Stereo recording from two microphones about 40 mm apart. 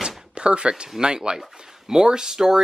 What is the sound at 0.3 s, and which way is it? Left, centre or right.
Speech, right.